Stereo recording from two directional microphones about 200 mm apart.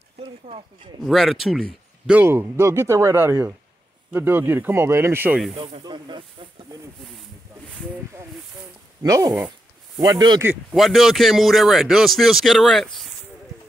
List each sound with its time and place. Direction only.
0.2 s speech: 25° right (ahead or behind)
1.0 s a man's voice: centre (ahead or behind)
5.6 s speech: 25° right (ahead or behind)
9.0 s speech: 15° right (ahead or behind)
10.7 s a man's voice: centre (ahead or behind)